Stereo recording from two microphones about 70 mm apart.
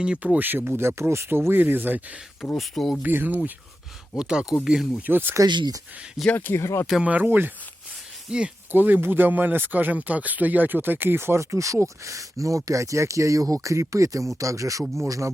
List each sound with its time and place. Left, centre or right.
0.0 s speech: centre
2.4 s speech: centre
3.0 s speech: right
4.2 s speech: centre
5.0 s speech: right
5.5 s speech: right
6.3 s speech: left
7.0 s speech: right
8.3 s speech: centre
8.7 s speech: right